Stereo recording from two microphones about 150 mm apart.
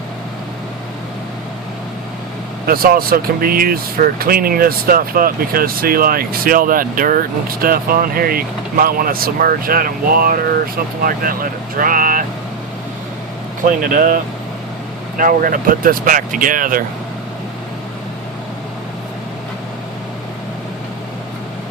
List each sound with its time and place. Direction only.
2.6 s speech: 80° right
13.7 s speech: 65° right (ahead or behind)
15.2 s speech: 65° right (ahead or behind)